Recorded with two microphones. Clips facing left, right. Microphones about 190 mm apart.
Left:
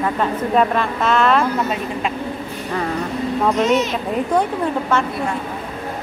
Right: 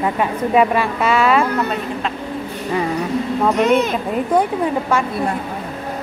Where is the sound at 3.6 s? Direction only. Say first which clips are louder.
Right 3 dB; 55° right (ahead or behind).